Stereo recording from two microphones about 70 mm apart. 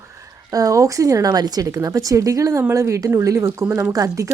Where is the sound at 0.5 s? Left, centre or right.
Right.